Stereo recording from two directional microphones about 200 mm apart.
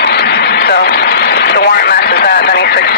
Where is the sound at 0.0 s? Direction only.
55° left (ahead or behind).